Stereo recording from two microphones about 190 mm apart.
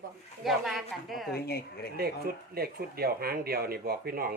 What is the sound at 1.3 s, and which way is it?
Speech, 55° left (ahead or behind).